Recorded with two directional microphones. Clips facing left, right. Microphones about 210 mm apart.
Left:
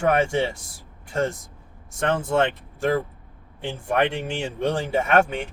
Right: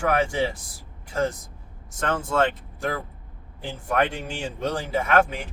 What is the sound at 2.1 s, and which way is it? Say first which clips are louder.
Speech: left 2 dB; 25° left (ahead or behind).